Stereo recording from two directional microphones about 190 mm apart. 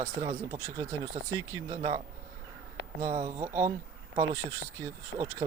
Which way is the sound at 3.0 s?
40° right (ahead or behind).